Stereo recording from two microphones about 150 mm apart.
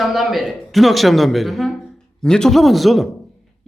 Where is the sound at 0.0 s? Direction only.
Centre (ahead or behind).